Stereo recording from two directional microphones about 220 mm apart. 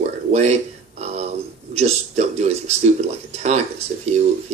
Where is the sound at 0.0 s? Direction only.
30° right (ahead or behind).